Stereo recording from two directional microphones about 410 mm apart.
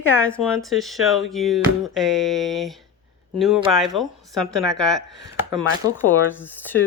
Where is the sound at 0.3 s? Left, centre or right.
Centre.